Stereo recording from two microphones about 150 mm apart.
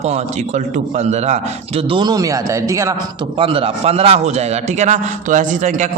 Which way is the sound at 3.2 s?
35° right (ahead or behind).